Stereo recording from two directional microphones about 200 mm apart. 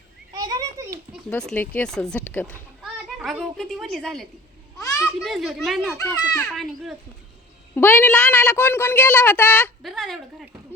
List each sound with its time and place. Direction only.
0.3 s children playing: 20° right (ahead or behind)
1.3 s a child's voice: 5° left (ahead or behind)